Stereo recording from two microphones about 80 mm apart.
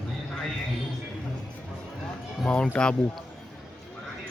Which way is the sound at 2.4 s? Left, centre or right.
Centre.